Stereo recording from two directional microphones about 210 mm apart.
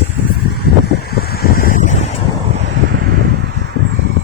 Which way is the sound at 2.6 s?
50° right (ahead or behind).